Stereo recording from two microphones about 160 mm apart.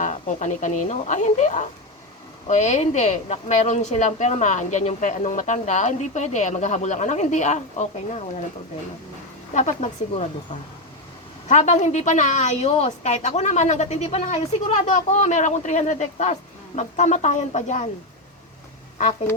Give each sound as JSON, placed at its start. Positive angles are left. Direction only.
{"t": 0.0, "sound": "a woman's voice", "side_deg": 50}
{"t": 9.6, "sound": "a woman's voice", "side_deg": 45}
{"t": 11.4, "sound": "a woman's voice", "side_deg": 45}